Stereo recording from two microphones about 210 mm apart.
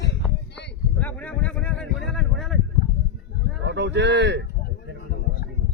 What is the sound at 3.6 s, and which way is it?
Speech, 55° right (ahead or behind).